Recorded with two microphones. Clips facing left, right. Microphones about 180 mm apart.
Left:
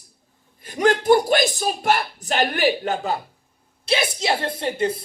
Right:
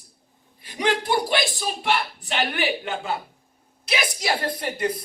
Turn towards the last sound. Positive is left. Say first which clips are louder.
# left 3 dB
turn(degrees=25)  # may be behind; listen again after turning